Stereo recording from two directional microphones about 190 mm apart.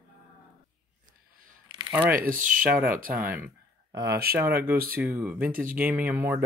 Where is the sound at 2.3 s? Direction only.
45° right (ahead or behind).